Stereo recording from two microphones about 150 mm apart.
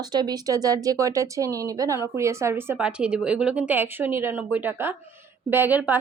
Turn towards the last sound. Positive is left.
turn(degrees=-10)  # may be behind; listen again after turning